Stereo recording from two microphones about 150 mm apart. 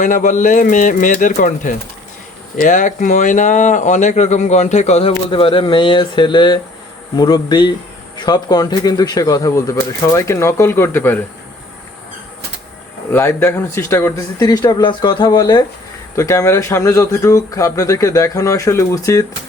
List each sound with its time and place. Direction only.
0.0 s speech: 60° left (ahead or behind); by 11.2 s 15° left (ahead or behind)
13.1 s speech: 15° left (ahead or behind)